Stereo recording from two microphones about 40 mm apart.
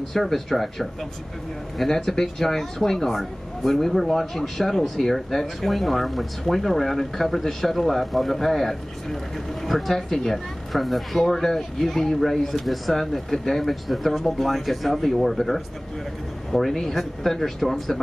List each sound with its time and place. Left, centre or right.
0.1 s speech: centre
1.9 s speech: centre